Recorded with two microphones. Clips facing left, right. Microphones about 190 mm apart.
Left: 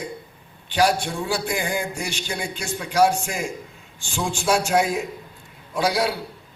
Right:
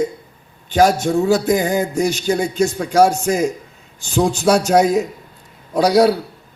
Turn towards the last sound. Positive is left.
turn(degrees=-40)  # may be behind; listen again after turning